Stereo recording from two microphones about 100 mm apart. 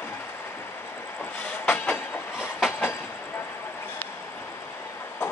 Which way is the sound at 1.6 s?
20° left (ahead or behind).